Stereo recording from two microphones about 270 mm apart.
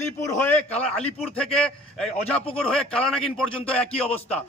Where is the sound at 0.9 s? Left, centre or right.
Centre.